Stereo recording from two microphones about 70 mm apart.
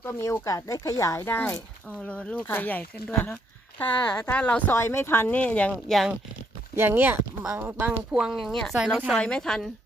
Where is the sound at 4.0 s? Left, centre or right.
Left.